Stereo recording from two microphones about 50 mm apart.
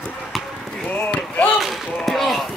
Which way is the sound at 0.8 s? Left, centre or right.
Left.